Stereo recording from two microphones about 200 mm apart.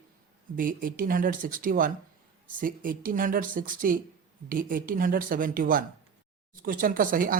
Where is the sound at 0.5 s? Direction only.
45° right (ahead or behind).